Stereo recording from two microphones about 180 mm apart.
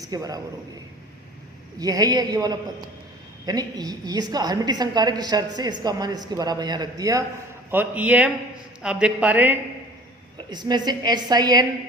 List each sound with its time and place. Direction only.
0.0 s a woman's voice: 20° right (ahead or behind)
1.8 s a woman's voice: 20° right (ahead or behind)
10.3 s a woman's voice: 25° right (ahead or behind)